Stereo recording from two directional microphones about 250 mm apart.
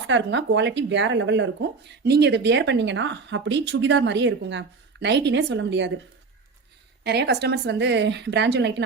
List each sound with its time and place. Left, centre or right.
0.1 s speech: right
7.0 s speech: right